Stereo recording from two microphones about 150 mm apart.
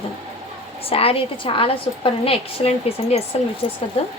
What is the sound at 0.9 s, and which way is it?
A woman's voice, 40° left (ahead or behind).